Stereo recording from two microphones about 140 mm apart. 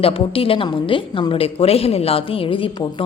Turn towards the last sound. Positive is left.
turn(degrees=40)  # may be behind; listen again after turning